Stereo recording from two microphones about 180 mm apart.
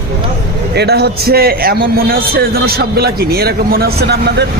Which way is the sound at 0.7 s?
65° right (ahead or behind).